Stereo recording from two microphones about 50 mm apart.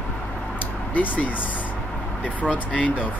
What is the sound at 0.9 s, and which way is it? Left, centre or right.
Speech, left.